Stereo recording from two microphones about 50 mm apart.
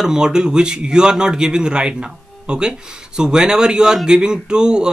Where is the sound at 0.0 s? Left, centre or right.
Centre.